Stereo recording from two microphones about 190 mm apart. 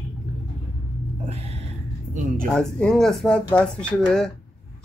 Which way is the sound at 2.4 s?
5° left (ahead or behind).